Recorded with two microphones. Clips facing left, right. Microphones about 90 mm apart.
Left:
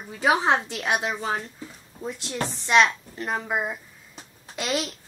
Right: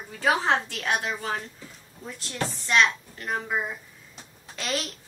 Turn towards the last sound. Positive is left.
turn(degrees=15)  # may be behind; listen again after turning